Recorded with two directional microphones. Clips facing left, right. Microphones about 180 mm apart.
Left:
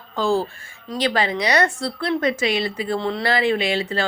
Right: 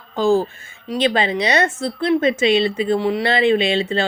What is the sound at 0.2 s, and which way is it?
Speech, 20° right (ahead or behind).